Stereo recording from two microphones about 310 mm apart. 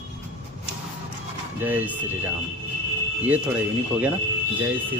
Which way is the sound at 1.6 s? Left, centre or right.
Centre.